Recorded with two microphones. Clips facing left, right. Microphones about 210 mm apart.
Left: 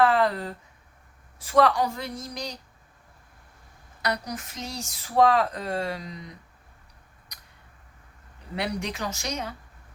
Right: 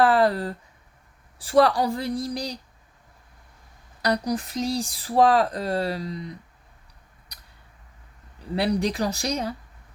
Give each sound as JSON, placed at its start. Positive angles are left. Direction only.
{"t": 0.0, "sound": "a sound", "side_deg": -35}
{"t": 1.4, "sound": "speech", "side_deg": -35}
{"t": 4.0, "sound": "speech", "side_deg": -35}
{"t": 8.5, "sound": "speech", "side_deg": -35}